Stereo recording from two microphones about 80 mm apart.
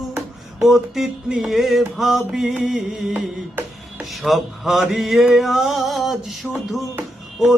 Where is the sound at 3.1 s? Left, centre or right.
Centre.